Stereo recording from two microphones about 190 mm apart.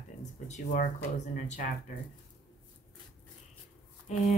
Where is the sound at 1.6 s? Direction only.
40° left (ahead or behind).